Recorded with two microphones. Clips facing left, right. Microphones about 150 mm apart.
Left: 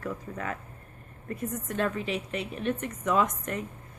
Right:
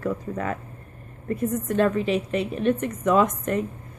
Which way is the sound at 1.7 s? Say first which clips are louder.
Right 8 dB; 50° right (ahead or behind).